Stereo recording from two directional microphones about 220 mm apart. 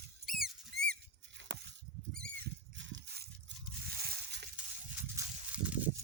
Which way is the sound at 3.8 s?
45° right (ahead or behind).